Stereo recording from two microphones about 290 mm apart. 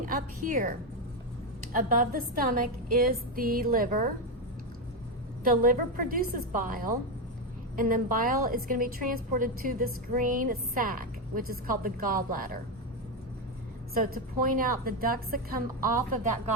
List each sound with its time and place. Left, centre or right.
0.0 s a woman's voice: right
5.4 s a woman's voice: right
13.9 s a woman's voice: right